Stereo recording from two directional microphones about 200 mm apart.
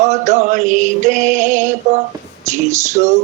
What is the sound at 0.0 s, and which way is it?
Mantra, 35° right (ahead or behind).